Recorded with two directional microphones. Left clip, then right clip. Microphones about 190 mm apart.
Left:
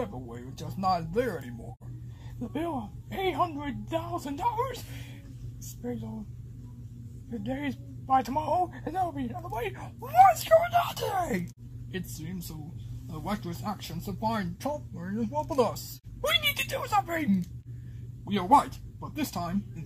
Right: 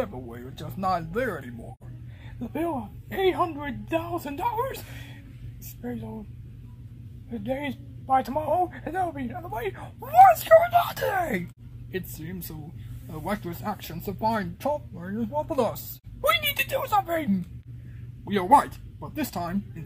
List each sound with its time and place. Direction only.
0.0 s speech: 20° right (ahead or behind)
2.5 s speech: 20° right (ahead or behind)
7.2 s speech: 25° right (ahead or behind)